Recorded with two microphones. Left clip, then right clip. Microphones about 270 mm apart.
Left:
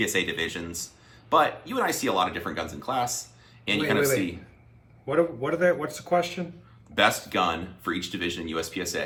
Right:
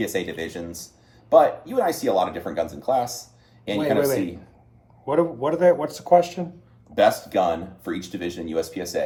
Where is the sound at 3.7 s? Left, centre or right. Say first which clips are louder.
Right 3 dB; centre.